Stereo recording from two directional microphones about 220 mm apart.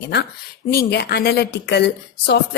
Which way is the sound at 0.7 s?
45° left (ahead or behind).